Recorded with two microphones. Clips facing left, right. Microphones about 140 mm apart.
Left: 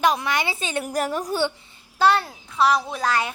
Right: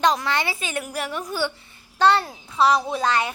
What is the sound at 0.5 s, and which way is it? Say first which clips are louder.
Speech: left 2 dB; 30° left (ahead or behind).